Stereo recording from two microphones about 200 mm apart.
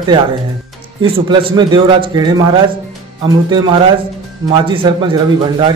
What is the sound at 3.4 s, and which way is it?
A man's voice, 20° right (ahead or behind).